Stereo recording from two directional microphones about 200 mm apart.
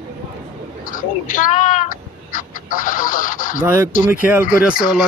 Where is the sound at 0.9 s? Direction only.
40° left (ahead or behind).